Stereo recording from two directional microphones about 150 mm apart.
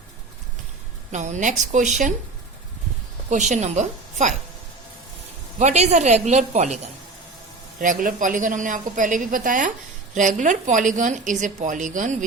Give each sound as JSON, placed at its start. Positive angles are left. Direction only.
{"t": 1.1, "sound": "a woman's voice", "side_deg": -50}
{"t": 3.2, "sound": "a woman's voice", "side_deg": -55}
{"t": 5.5, "sound": "a woman's voice", "side_deg": -50}
{"t": 7.8, "sound": "a woman's voice", "side_deg": -65}